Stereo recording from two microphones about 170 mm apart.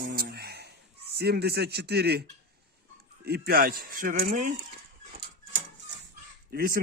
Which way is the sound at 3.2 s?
65° right (ahead or behind).